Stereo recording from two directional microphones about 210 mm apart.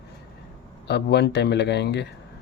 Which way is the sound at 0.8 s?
50° left (ahead or behind).